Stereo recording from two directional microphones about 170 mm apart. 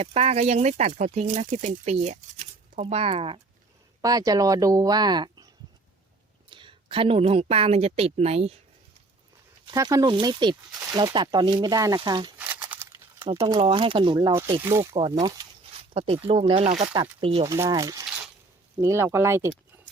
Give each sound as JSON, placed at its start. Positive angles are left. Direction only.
{"t": 0.0, "sound": "speech", "side_deg": -40}
{"t": 4.0, "sound": "a woman's voice", "side_deg": -20}
{"t": 6.5, "sound": "speech", "side_deg": -30}
{"t": 9.7, "sound": "a woman's voice", "side_deg": -20}
{"t": 12.4, "sound": "crumpling", "side_deg": -10}
{"t": 13.3, "sound": "speech", "side_deg": -20}
{"t": 13.6, "sound": "a woman's voice", "side_deg": -30}
{"t": 14.9, "sound": "a woman's voice", "side_deg": -25}
{"t": 16.0, "sound": "speech", "side_deg": -35}
{"t": 17.5, "sound": "a woman's voice", "side_deg": -20}